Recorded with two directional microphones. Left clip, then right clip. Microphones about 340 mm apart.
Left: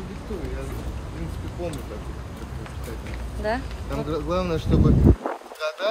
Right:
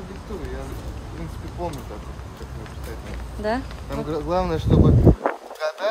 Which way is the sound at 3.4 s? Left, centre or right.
Centre.